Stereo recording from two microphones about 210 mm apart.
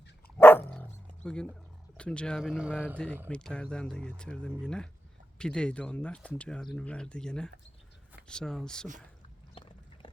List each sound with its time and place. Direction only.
0.3 s dog: 10° left (ahead or behind)
1.2 s speech: 5° left (ahead or behind)
9.6 s a sound: 25° left (ahead or behind)